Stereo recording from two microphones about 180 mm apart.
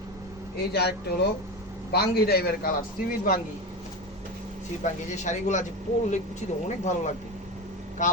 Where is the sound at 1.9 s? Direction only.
60° left (ahead or behind).